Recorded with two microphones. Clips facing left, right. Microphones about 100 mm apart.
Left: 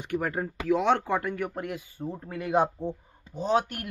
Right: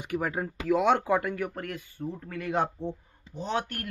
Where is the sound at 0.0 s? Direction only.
5° right (ahead or behind).